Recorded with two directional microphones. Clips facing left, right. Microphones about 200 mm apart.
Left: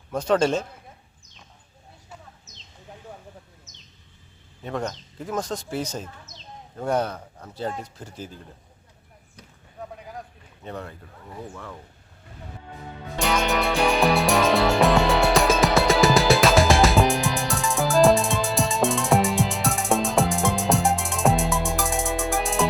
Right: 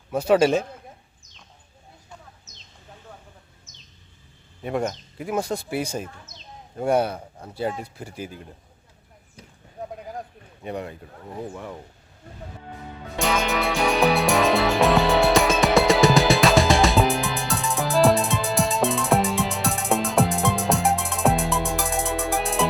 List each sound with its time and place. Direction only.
0.1 s speech: 10° right (ahead or behind)
4.6 s speech: 10° right (ahead or behind)
10.6 s speech: 15° right (ahead or behind)
13.1 s music: centre (ahead or behind)